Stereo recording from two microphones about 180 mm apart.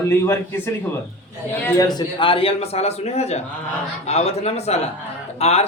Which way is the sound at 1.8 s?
25° left (ahead or behind).